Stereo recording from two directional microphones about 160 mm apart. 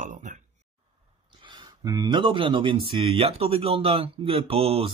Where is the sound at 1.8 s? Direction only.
25° right (ahead or behind).